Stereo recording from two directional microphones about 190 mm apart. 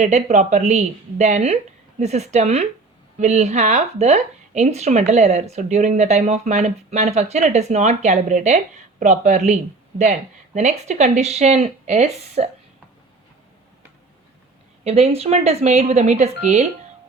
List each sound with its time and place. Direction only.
0.0 s a woman's voice: 35° right (ahead or behind)
14.8 s a woman's voice: 35° right (ahead or behind)